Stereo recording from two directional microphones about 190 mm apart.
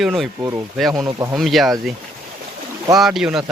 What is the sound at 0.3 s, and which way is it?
Speech, 15° right (ahead or behind).